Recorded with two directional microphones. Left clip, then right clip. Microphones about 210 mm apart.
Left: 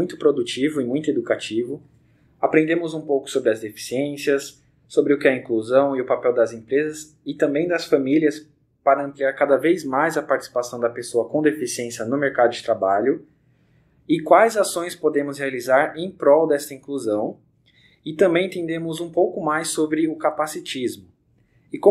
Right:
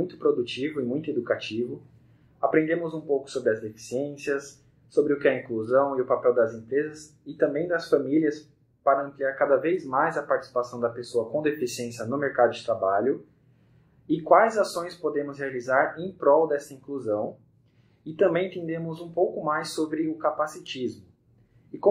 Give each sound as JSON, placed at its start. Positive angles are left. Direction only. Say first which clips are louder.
{"t": 0.0, "sound": "speech", "louder": "left 5 dB", "side_deg": 35}
{"t": 14.0, "sound": "speech", "louder": "left 4 dB", "side_deg": 35}